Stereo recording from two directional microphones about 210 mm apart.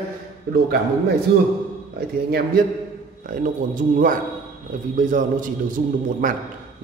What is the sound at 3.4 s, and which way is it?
Speech, 40° right (ahead or behind).